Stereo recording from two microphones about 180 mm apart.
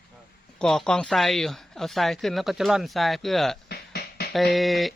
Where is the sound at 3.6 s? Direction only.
60° left (ahead or behind).